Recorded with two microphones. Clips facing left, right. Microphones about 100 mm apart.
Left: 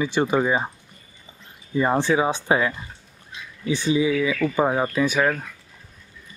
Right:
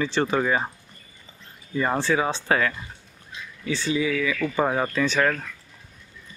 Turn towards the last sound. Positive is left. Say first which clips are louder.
# left 2 dB
turn(degrees=10)  # may be behind; listen again after turning